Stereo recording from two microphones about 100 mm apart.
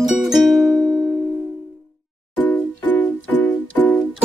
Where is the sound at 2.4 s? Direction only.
15° left (ahead or behind).